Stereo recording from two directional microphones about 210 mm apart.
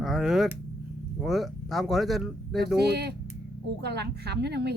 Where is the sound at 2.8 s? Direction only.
50° right (ahead or behind).